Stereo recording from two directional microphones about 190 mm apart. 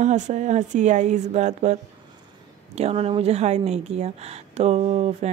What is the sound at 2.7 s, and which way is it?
Speech, 35° right (ahead or behind).